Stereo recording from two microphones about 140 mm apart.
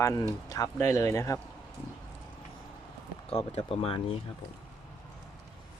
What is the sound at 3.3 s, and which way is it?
Speech, 45° left (ahead or behind).